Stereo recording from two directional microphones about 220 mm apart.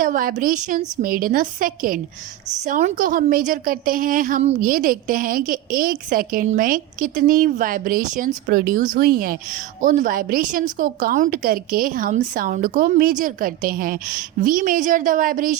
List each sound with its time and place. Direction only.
0.0 s a woman's voice: 40° right (ahead or behind)